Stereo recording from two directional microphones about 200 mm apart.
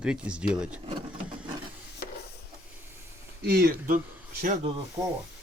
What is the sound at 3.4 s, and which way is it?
Speech, 50° right (ahead or behind).